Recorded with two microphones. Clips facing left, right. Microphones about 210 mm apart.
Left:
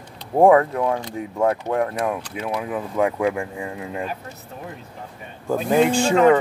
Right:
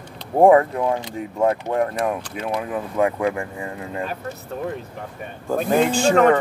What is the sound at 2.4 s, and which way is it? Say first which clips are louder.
Speech: right 1 dB; 5° left (ahead or behind).